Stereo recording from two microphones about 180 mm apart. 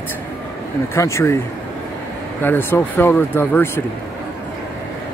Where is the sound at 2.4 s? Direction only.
10° left (ahead or behind).